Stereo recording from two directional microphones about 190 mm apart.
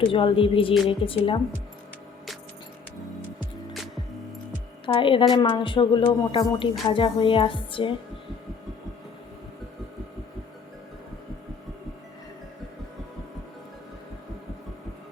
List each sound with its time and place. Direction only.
0.0 s speech: 30° left (ahead or behind)
4.9 s speech: 25° left (ahead or behind)